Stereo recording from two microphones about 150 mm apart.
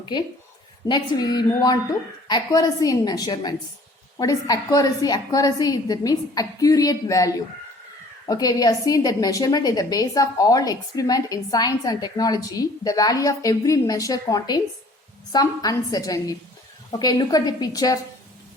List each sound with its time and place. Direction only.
0.9 s a woman's voice: 25° left (ahead or behind)
8.3 s a woman's voice: 25° left (ahead or behind)